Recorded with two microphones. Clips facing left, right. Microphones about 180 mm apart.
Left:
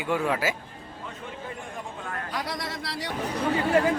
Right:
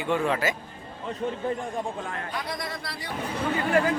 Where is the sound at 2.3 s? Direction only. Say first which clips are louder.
Left 3 dB; 85° left.